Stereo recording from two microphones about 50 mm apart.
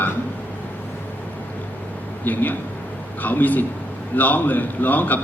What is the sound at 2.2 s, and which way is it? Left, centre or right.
A man's voice, left.